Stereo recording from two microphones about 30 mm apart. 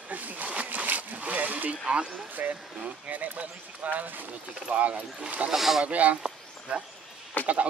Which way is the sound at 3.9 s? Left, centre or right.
Right.